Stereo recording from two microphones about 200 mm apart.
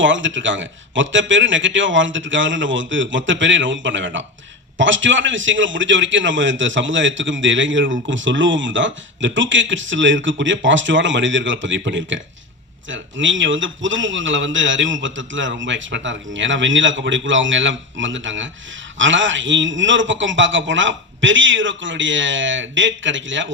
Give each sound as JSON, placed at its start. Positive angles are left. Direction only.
{"t": 0.0, "sound": "a man's voice", "side_deg": -70}